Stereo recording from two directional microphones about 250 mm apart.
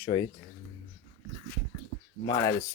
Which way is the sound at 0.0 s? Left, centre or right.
Centre.